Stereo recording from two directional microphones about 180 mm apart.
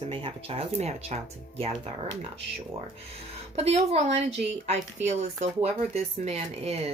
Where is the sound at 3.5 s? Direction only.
35° right (ahead or behind).